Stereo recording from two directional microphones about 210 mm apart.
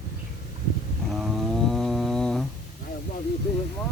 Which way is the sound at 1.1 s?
Centre (ahead or behind).